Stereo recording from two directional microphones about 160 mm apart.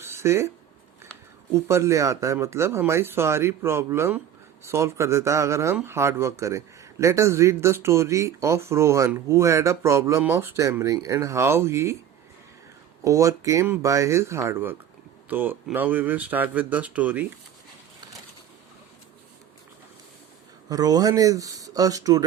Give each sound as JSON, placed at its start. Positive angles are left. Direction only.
{"t": 0.0, "sound": "a sound", "side_deg": -15}
{"t": 1.5, "sound": "speech", "side_deg": -15}
{"t": 13.1, "sound": "speech", "side_deg": -20}
{"t": 20.7, "sound": "speech", "side_deg": -25}